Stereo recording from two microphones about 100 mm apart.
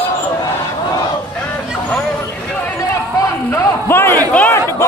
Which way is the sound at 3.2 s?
30° left (ahead or behind).